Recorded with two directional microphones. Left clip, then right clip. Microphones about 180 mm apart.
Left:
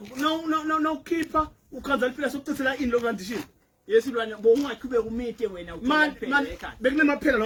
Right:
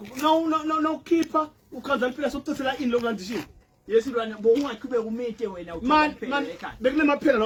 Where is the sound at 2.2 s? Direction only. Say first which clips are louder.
Even; 25° left (ahead or behind).